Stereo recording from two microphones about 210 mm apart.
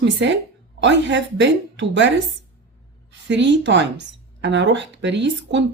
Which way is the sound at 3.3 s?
55° right (ahead or behind).